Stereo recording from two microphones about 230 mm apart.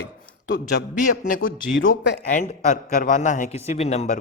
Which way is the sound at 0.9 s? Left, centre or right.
Left.